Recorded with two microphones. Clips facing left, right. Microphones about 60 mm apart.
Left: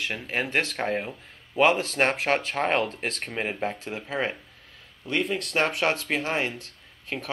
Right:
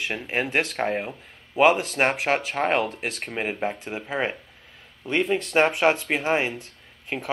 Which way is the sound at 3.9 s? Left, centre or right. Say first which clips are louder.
Right 2 dB; right.